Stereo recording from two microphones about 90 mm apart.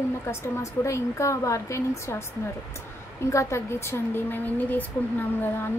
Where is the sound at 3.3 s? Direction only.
35° left (ahead or behind).